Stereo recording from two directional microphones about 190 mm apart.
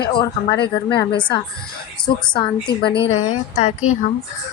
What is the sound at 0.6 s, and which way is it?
Speech, 60° left (ahead or behind).